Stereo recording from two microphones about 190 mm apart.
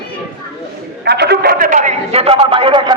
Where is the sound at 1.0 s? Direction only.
60° right (ahead or behind); by 2.9 s 25° right (ahead or behind).